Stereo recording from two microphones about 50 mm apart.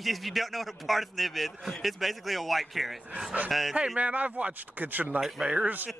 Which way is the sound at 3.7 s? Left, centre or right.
Right.